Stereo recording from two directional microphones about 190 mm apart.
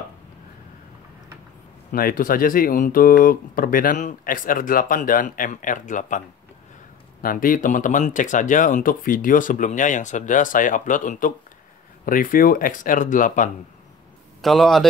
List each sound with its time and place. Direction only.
1.9 s speech: 50° left (ahead or behind)
14.4 s speech: centre (ahead or behind)